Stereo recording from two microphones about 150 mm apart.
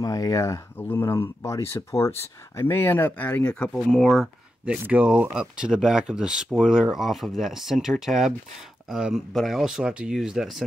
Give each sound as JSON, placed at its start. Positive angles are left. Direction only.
{"t": 0.0, "sound": "speech", "side_deg": 20}